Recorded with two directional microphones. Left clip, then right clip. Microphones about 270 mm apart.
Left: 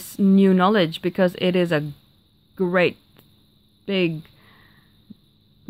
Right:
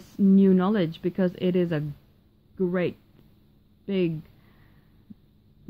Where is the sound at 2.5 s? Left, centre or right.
Left.